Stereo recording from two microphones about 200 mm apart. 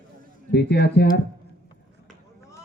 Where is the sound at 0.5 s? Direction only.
60° left (ahead or behind).